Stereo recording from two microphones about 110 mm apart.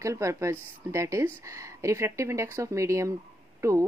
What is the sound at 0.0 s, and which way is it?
Speech, 30° right (ahead or behind).